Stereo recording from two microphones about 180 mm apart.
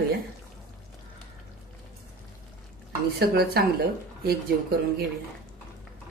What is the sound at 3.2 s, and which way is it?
Speech, 60° right (ahead or behind).